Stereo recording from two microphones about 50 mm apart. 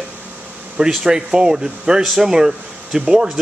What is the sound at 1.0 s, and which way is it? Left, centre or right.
Speech, centre.